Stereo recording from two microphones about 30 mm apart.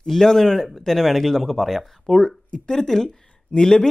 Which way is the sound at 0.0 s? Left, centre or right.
Centre.